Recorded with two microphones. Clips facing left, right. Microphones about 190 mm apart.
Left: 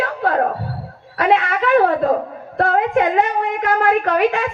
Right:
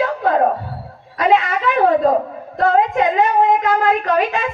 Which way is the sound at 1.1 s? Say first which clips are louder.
Right 1 dB; 60° left (ahead or behind).